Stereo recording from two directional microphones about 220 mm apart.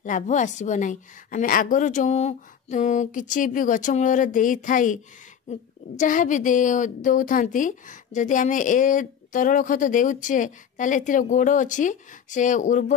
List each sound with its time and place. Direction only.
0.0 s a woman's voice: 35° left (ahead or behind)